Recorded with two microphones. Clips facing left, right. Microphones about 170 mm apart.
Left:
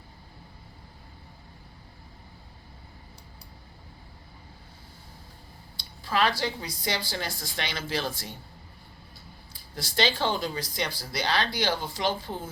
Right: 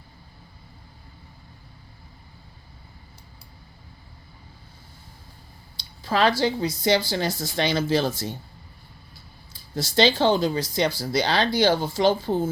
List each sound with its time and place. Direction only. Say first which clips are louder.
6.1 s speech: right 5 dB; 30° right (ahead or behind)
9.7 s speech: right 7 dB; 25° right (ahead or behind)